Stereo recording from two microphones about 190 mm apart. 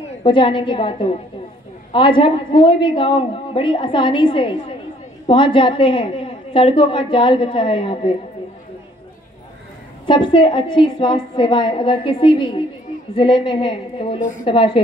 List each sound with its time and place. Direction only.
0.2 s a woman's voice: 25° left (ahead or behind)
10.0 s a woman's voice: 25° left (ahead or behind)